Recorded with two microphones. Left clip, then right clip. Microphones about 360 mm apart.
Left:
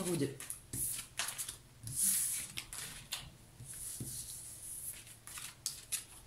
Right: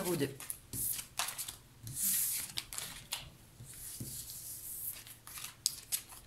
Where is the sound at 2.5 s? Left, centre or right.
Centre.